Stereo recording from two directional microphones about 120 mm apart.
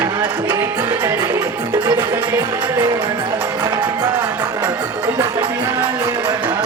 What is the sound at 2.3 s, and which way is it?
Music, 20° right (ahead or behind).